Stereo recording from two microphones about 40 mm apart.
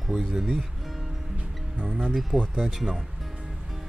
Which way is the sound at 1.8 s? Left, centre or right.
Right.